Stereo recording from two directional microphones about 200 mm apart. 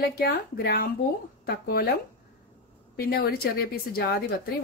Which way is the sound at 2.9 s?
50° left (ahead or behind).